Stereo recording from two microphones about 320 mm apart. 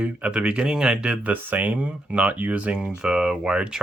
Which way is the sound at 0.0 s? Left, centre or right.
Centre.